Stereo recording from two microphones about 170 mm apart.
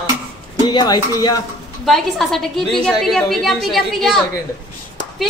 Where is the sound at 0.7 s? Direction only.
25° left (ahead or behind).